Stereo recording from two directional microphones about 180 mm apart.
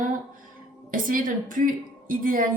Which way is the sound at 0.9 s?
50° right (ahead or behind).